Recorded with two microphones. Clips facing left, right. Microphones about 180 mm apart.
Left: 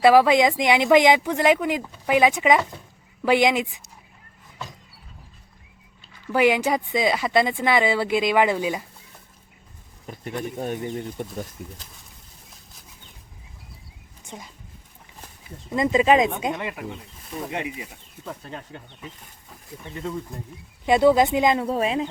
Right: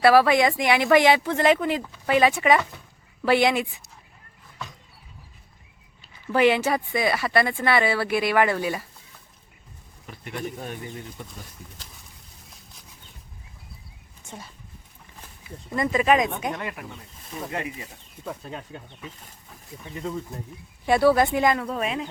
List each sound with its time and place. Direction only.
0.0 s speech: 15° left (ahead or behind)
6.3 s speech: 10° left (ahead or behind)
10.6 s speech: 45° left (ahead or behind)
11.6 s speech: 65° left (ahead or behind)
14.3 s speech: 15° left (ahead or behind)
15.7 s speech: 20° left (ahead or behind)
18.3 s speech: 10° right (ahead or behind)
20.8 s speech: 20° left (ahead or behind)